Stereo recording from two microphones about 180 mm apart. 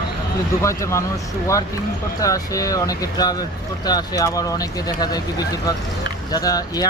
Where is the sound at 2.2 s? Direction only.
20° left (ahead or behind).